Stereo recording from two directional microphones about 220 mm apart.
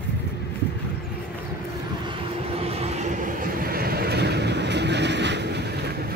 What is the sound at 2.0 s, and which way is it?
Vehicle, 25° right (ahead or behind).